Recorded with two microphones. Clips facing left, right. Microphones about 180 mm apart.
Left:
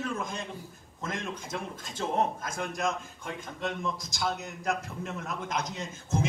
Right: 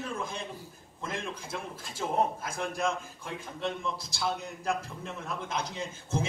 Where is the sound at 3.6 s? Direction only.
30° right (ahead or behind).